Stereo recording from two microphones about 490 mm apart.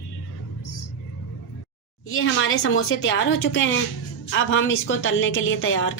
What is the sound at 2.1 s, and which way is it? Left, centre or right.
A woman's voice, left.